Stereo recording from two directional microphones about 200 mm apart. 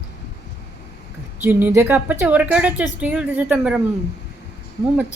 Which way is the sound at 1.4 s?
10° right (ahead or behind).